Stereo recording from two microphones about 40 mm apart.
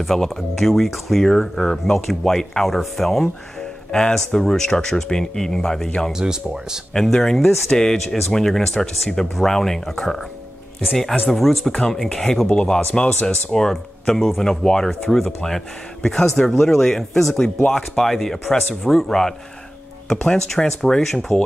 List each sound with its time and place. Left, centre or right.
0.0 s speech: centre
1.2 s speech: centre
4.3 s speech: centre
6.1 s speech: centre
6.9 s speech: centre
11.2 s speech: centre
12.4 s speech: left
13.5 s speech: centre